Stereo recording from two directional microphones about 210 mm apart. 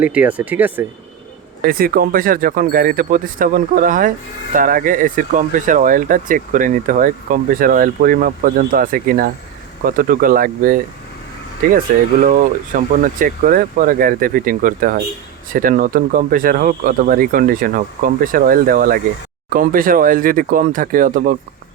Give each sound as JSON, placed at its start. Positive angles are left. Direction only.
{"t": 0.0, "sound": "speech", "side_deg": -5}
{"t": 1.6, "sound": "speech", "side_deg": -45}
{"t": 12.2, "sound": "speech", "side_deg": -40}